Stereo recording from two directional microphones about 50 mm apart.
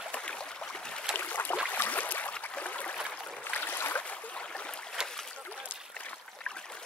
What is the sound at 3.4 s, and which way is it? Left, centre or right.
Boat, left.